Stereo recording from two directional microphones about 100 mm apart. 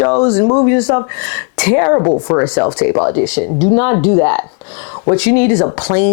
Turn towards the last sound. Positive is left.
turn(degrees=15)  # may be behind; listen again after turning